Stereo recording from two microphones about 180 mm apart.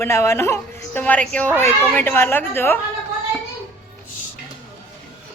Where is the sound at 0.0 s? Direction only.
15° left (ahead or behind).